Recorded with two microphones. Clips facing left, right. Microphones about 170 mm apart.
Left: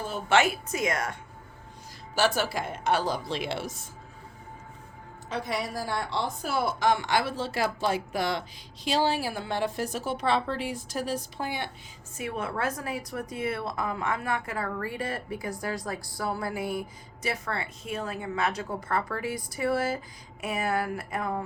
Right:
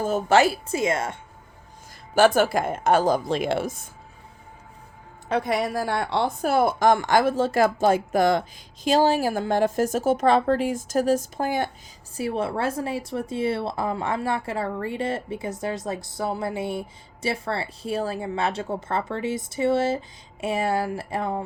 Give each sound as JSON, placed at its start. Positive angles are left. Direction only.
{"t": 0.0, "sound": "a woman's voice", "side_deg": -40}
{"t": 2.1, "sound": "a woman's voice", "side_deg": -50}
{"t": 5.3, "sound": "a woman's voice", "side_deg": -60}
{"t": 12.1, "sound": "a woman's voice", "side_deg": -30}